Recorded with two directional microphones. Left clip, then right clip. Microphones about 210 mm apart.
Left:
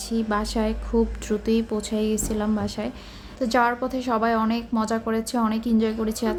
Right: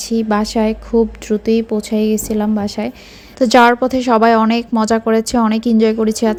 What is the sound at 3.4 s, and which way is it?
A woman's voice, 35° right (ahead or behind).